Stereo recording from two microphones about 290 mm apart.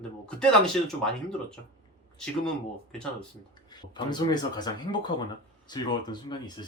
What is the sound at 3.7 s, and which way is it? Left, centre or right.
Speech, centre.